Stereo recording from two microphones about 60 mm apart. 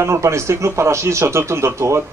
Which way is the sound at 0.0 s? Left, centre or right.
Right.